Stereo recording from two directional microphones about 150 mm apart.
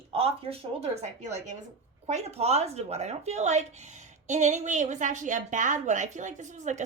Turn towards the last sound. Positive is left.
turn(degrees=-55)  # may be behind; listen again after turning